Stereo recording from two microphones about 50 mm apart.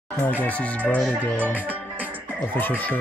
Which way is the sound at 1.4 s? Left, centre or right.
Right.